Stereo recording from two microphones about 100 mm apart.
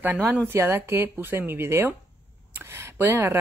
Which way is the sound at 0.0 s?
20° right (ahead or behind).